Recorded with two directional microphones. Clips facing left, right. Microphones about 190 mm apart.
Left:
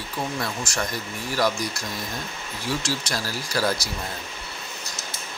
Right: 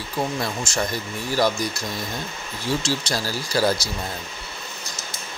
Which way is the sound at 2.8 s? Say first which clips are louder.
Right 3 dB; 30° right (ahead or behind).